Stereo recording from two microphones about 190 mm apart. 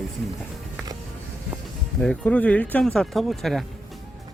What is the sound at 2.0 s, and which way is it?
Speech, 5° left (ahead or behind).